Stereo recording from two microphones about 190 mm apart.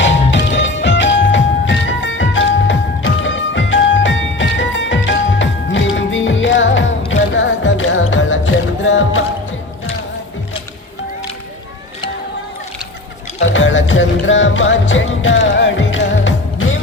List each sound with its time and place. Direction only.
0.0 s music: 70° left (ahead or behind)
13.4 s music: 80° left